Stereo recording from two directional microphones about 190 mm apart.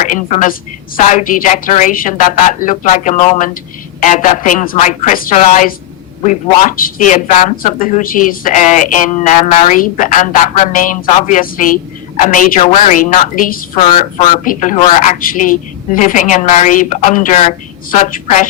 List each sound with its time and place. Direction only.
0.0 s a woman's voice: 40° left (ahead or behind)